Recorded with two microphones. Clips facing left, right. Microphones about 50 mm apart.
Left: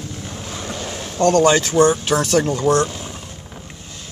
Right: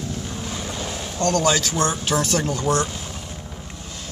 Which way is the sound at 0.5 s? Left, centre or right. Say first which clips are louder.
Left 3 dB; centre.